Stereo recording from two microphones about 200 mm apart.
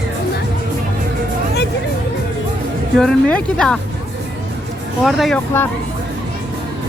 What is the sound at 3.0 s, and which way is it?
Speech, 5° left (ahead or behind).